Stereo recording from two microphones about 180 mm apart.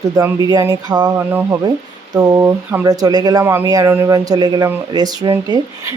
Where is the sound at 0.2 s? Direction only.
20° right (ahead or behind).